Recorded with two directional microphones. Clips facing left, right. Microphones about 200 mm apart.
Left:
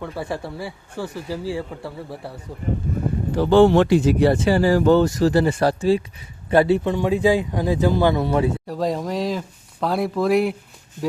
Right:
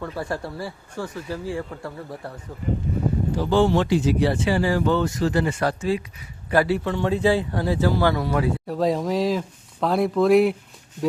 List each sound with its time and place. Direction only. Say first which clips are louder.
0.2 s speech: left 1 dB; centre (ahead or behind)
3.3 s a man's voice: left 7 dB; 65° left (ahead or behind); by 8.5 s 25° left (ahead or behind)
8.6 s speech: right 1 dB; centre (ahead or behind)